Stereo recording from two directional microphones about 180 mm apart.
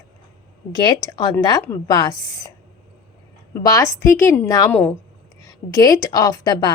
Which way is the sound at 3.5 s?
20° left (ahead or behind).